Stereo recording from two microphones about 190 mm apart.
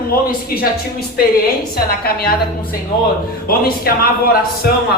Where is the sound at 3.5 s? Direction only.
55° left (ahead or behind).